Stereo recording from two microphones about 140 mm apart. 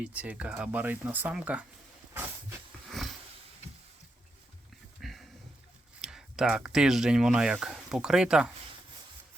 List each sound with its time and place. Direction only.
0.0 s speech: 10° right (ahead or behind)
4.9 s a sound: centre (ahead or behind)
6.0 s speech: 5° right (ahead or behind)